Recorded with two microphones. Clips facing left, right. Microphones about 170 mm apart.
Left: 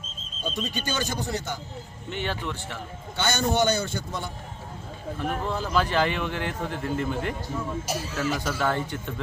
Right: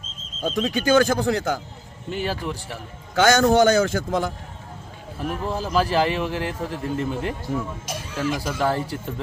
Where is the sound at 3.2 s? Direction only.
90° right.